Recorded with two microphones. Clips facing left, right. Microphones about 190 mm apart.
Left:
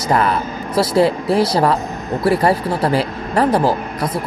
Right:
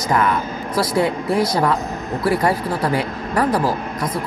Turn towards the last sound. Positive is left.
turn(degrees=25)  # may be behind; listen again after turning